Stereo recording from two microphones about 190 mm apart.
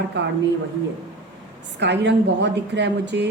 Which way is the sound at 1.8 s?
65° right (ahead or behind).